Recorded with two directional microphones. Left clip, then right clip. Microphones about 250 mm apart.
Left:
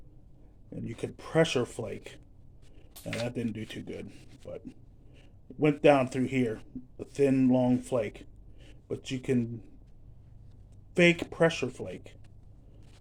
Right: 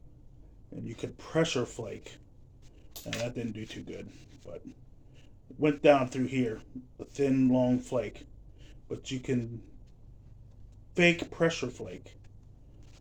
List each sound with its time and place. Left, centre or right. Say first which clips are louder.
0.7 s speech: left 2 dB; left
3.2 s speech: left 2 dB; left
10.9 s speech: left 2 dB; left